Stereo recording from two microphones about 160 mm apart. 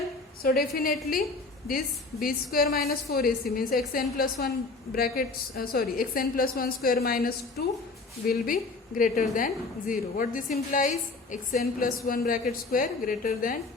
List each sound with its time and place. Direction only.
0.4 s a woman's voice: 70° left (ahead or behind)
9.0 s a woman's voice: 55° left (ahead or behind)